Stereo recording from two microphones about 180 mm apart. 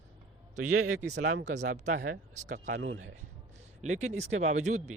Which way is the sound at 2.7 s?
90° right.